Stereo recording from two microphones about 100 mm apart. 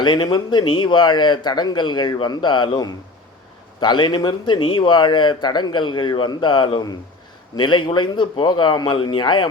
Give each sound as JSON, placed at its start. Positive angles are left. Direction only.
{"t": 0.0, "sound": "speech", "side_deg": 50}